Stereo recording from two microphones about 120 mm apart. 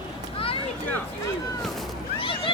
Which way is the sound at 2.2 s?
45° left (ahead or behind).